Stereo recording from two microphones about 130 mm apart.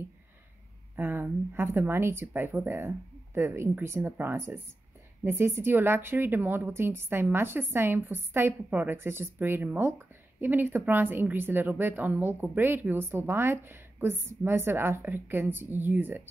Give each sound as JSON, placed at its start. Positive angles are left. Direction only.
{"t": 0.9, "sound": "a woman's voice", "side_deg": -15}